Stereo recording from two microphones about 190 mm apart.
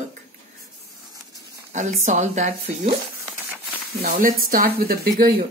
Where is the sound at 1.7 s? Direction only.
40° right (ahead or behind).